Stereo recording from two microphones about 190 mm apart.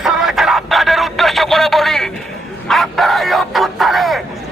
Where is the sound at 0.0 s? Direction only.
5° right (ahead or behind).